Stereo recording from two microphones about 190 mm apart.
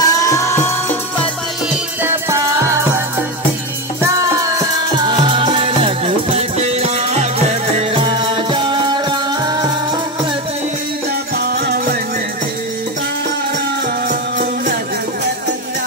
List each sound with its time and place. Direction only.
0.0 s music: 15° left (ahead or behind)
2.0 s music: 15° right (ahead or behind)
4.0 s music: 15° right (ahead or behind)
11.3 s music: 55° right (ahead or behind)
14.0 s music: 45° right (ahead or behind)